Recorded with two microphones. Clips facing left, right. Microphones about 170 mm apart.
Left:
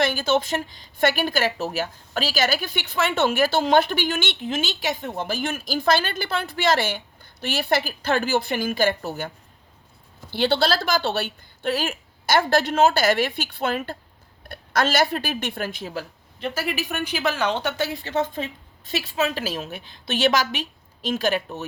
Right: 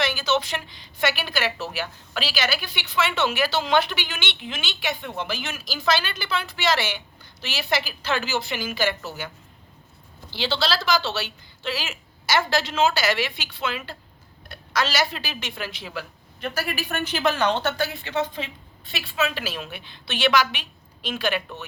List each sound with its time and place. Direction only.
0.0 s a woman's voice: 50° left (ahead or behind)
10.3 s a woman's voice: 55° left (ahead or behind); by 16.5 s 40° left (ahead or behind)
16.6 s speech: 20° left (ahead or behind)
17.7 s a woman's voice: 30° left (ahead or behind)
18.0 s a woman's voice: 45° left (ahead or behind)